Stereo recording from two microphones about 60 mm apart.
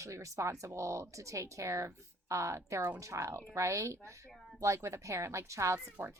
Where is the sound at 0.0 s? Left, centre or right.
Right.